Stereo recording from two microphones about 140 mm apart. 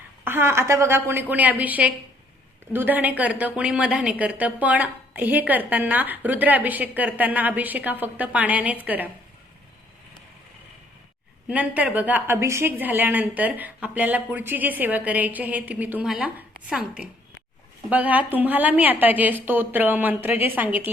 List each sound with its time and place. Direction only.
0.3 s a woman's voice: 15° right (ahead or behind)
11.4 s a woman's voice: 10° right (ahead or behind)